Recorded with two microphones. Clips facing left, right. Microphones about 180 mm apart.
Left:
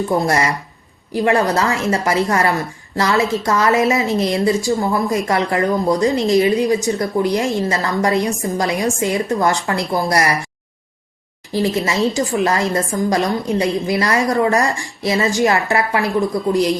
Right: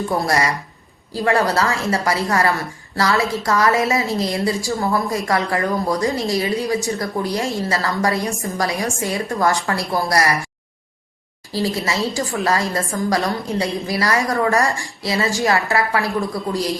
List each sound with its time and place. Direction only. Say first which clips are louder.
1.1 s a woman's voice: left 2 dB; 20° left (ahead or behind)
11.5 s a woman's voice: left 4 dB; 20° left (ahead or behind)